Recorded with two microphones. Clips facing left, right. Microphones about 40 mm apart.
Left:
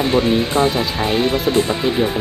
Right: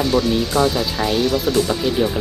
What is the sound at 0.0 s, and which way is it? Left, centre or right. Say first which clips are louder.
Speech: left 2 dB; left.